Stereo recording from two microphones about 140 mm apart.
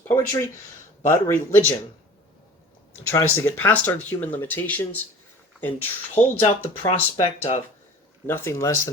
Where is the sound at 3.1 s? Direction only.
15° left (ahead or behind).